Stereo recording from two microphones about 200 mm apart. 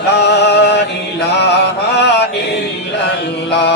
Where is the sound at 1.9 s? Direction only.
55° left (ahead or behind).